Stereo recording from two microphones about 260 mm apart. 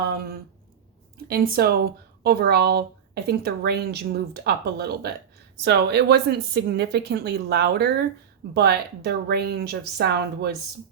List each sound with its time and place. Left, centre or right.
1.3 s speech: right